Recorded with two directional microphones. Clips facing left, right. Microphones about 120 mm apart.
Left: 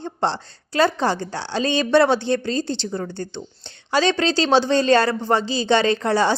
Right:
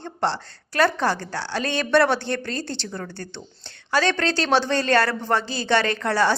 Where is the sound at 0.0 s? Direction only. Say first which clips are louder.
Left 2 dB; 20° left (ahead or behind).